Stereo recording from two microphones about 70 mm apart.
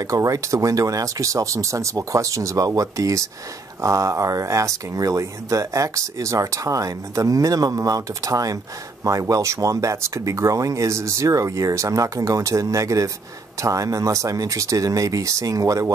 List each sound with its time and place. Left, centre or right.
0.0 s speech: right